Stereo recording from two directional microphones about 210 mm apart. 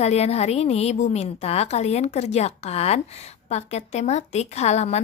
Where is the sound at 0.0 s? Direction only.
30° left (ahead or behind).